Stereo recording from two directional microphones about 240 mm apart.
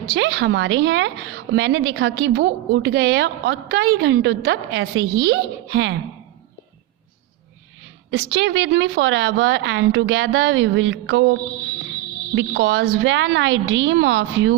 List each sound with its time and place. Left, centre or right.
0.0 s a woman's voice: right
8.1 s a woman's voice: right